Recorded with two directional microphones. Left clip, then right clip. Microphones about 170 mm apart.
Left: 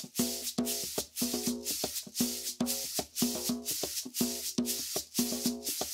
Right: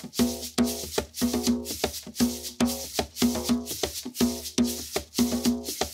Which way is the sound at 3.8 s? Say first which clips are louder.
Right 6 dB; centre (ahead or behind).